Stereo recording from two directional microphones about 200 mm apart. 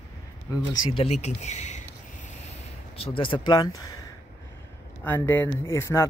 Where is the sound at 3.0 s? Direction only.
25° left (ahead or behind).